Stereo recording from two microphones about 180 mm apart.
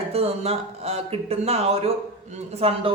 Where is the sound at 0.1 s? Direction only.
35° right (ahead or behind).